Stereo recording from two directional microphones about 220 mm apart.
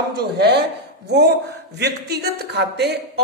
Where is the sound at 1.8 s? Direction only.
50° right (ahead or behind).